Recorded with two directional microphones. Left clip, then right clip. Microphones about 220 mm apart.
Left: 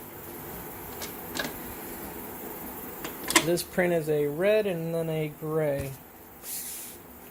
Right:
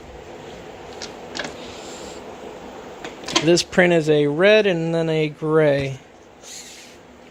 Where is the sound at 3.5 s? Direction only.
45° right (ahead or behind).